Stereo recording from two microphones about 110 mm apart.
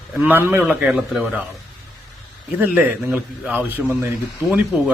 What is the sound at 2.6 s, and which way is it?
A man's voice, 15° right (ahead or behind).